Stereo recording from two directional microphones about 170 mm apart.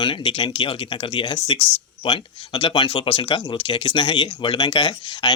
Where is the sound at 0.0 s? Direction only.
30° left (ahead or behind).